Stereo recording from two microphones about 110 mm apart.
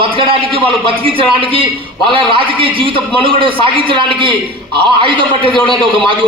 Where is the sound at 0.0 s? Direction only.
55° right (ahead or behind).